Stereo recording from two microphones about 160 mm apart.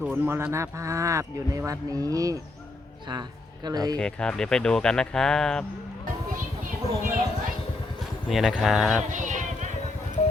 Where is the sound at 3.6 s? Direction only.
25° right (ahead or behind).